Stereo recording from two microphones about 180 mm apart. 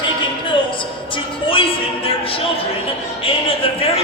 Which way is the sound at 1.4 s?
30° left (ahead or behind).